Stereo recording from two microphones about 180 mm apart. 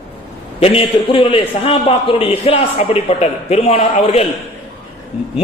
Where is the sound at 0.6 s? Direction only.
30° left (ahead or behind).